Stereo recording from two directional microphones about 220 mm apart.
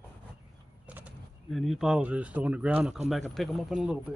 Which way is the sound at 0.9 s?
5° right (ahead or behind).